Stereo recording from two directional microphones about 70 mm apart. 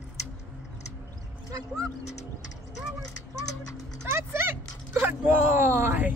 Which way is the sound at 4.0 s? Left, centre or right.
Right.